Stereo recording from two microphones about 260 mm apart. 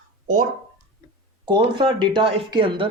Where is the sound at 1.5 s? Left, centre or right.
Centre.